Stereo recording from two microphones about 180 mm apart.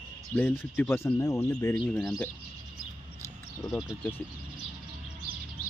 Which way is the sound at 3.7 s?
5° right (ahead or behind).